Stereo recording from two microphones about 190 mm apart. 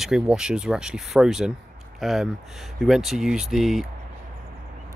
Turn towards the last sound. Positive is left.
turn(degrees=0)  # may be behind; listen again after turning